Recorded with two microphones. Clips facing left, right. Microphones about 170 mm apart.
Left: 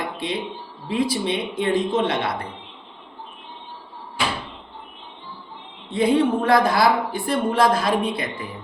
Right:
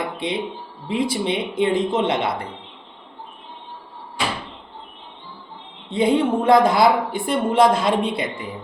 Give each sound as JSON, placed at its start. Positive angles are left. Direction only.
{"t": 0.2, "sound": "a woman's voice", "side_deg": -20}
{"t": 5.9, "sound": "a woman's voice", "side_deg": -25}